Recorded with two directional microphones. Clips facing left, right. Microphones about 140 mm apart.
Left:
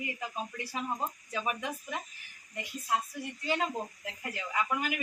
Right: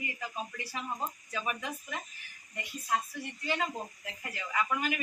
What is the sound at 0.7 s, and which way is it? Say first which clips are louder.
A woman's voice: left 4 dB; 20° left (ahead or behind).